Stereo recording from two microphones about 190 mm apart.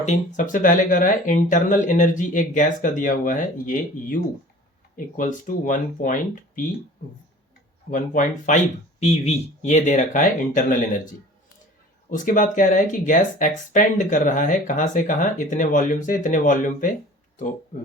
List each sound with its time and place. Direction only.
0.3 s speech: 45° left (ahead or behind)
7.9 s speech: 45° left (ahead or behind)
12.1 s speech: 45° left (ahead or behind)